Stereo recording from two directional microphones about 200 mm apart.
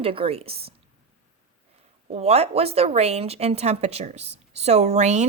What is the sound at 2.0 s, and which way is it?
Speech, 30° right (ahead or behind).